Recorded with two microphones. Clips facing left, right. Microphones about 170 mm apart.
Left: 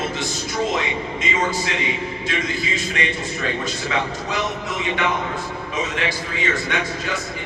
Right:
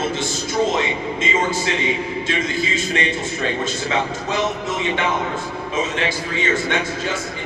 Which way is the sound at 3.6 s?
25° right (ahead or behind).